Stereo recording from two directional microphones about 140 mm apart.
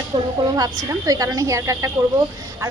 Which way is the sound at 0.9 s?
25° right (ahead or behind).